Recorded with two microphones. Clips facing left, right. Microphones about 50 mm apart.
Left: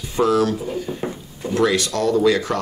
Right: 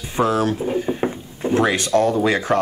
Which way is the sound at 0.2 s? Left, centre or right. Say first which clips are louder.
Left 1 dB; right.